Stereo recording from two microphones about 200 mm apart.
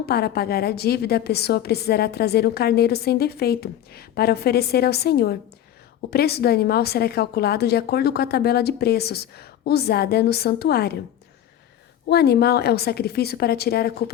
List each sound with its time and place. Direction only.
0.0 s a woman's voice: 50° left (ahead or behind)
12.0 s a woman's voice: 55° left (ahead or behind)